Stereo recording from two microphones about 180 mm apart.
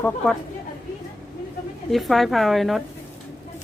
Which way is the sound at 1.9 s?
Centre (ahead or behind).